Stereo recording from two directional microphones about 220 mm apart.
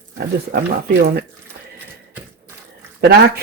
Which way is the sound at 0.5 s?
45° right (ahead or behind).